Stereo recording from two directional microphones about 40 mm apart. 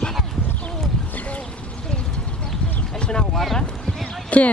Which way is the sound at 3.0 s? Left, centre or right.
Centre.